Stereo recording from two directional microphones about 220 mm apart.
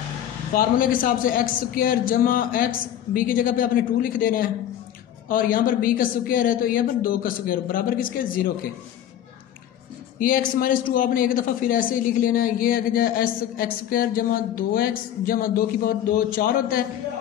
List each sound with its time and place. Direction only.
0.6 s a man's voice: 40° left (ahead or behind)
10.1 s a man's voice: 40° left (ahead or behind)